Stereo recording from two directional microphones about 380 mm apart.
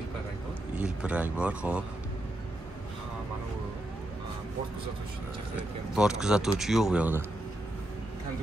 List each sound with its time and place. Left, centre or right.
1.0 s speech: centre
5.6 s speech: centre